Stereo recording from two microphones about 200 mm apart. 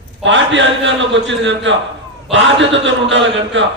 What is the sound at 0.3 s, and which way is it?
A man's voice, 65° right (ahead or behind).